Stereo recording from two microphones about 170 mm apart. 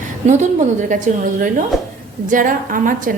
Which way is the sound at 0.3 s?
45° right (ahead or behind).